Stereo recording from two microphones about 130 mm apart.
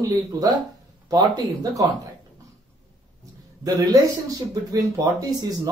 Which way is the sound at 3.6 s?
30° right (ahead or behind).